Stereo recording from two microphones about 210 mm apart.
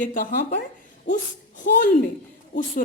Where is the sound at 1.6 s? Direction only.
40° left (ahead or behind).